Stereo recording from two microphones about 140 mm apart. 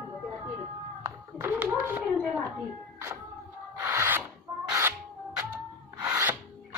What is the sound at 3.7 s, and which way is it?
Rub, 15° right (ahead or behind).